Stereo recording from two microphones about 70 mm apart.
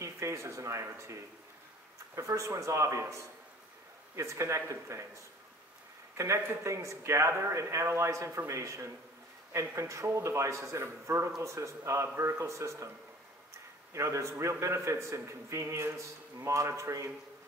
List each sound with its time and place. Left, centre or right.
0.0 s a man's voice: right
6.1 s a man's voice: right
13.9 s a man's voice: right